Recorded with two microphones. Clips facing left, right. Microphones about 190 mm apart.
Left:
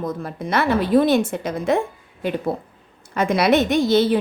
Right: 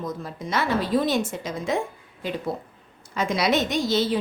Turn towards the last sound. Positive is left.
turn(degrees=60)  # may be behind; listen again after turning